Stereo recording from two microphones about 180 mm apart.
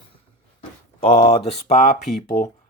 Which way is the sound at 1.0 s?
35° left (ahead or behind).